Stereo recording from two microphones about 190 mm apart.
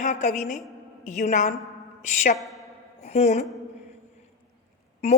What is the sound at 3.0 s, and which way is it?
Speech, 35° left (ahead or behind).